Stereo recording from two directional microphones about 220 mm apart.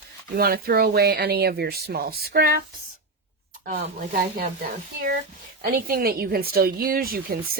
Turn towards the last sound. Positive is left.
turn(degrees=-40)  # may be behind; listen again after turning